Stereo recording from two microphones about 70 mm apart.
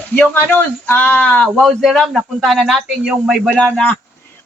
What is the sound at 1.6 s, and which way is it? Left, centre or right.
A man's voice, centre.